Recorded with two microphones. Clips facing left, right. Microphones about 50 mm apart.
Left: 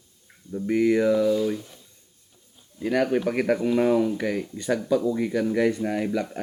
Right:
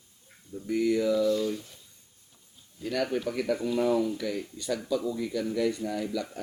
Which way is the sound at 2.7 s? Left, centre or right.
Left.